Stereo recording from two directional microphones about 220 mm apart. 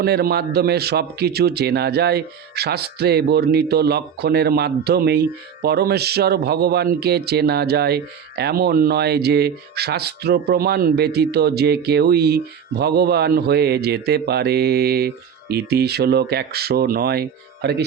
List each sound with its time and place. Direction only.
0.0 s speech: 45° right (ahead or behind)